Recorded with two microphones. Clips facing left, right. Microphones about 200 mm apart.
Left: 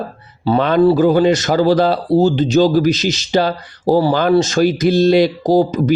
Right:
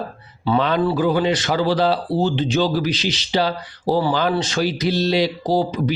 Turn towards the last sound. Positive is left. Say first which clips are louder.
# left 6 dB
turn(degrees=45)  # may be behind; listen again after turning